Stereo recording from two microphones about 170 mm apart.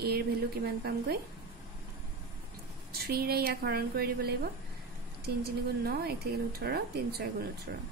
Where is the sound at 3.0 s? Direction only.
65° right (ahead or behind).